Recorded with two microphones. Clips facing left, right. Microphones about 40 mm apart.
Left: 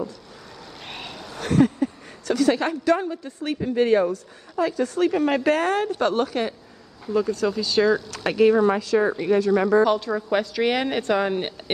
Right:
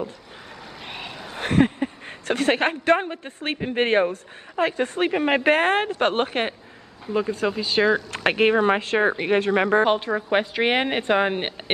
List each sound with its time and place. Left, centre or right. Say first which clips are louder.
0.8 s vehicle: right 1 dB; centre
1.3 s a woman's voice: left 1 dB; right
7.1 s speech: left 1 dB; right